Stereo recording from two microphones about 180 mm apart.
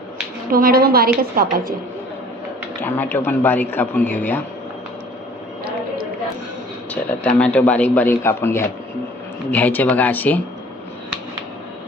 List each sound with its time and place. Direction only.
0.5 s a woman's voice: 55° right (ahead or behind)
2.8 s a man's voice: 10° left (ahead or behind)
6.9 s a man's voice: 5° left (ahead or behind)